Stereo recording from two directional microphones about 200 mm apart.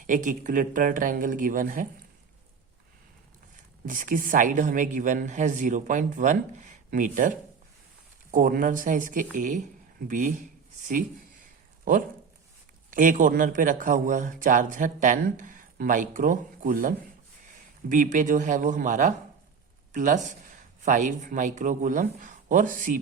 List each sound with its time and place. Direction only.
0.0 s a man's voice: 40° right (ahead or behind)
3.8 s a man's voice: 40° right (ahead or behind)
12.9 s a man's voice: 40° right (ahead or behind)